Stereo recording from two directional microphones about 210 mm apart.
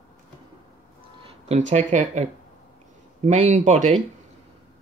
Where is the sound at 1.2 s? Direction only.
35° right (ahead or behind).